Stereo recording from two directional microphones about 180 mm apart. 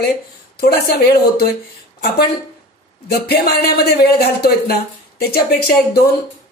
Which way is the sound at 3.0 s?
60° left (ahead or behind).